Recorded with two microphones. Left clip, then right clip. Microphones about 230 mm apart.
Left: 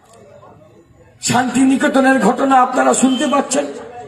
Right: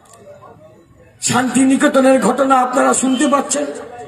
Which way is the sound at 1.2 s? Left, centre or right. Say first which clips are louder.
Even; right.